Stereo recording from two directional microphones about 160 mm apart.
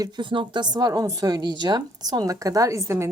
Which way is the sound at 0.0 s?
30° right (ahead or behind).